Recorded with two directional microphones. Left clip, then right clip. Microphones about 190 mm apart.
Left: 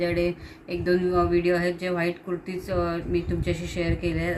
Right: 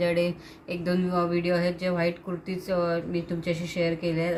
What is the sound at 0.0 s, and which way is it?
Speech, 50° right (ahead or behind).